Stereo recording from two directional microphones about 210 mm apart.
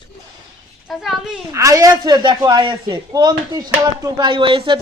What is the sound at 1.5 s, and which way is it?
Speech, 15° right (ahead or behind).